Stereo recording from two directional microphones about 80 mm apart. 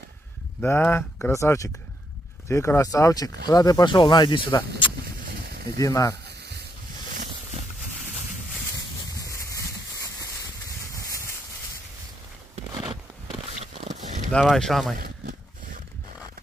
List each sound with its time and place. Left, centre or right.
0.6 s speech: left
3.8 s speech: left
5.8 s speech: left
9.2 s a sound: left
14.4 s speech: centre